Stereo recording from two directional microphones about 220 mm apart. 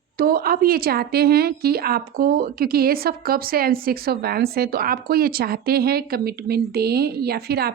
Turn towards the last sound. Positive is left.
turn(degrees=-45)  # may be behind; listen again after turning